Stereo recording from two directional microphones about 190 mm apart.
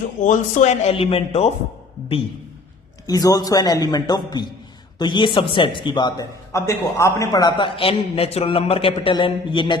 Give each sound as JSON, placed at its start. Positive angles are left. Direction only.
{"t": 0.2, "sound": "speech", "side_deg": 40}
{"t": 3.1, "sound": "a man's voice", "side_deg": 20}